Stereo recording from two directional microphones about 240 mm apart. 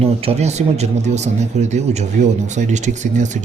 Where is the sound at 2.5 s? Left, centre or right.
Right.